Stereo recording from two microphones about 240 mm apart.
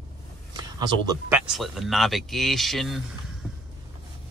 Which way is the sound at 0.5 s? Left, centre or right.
Centre.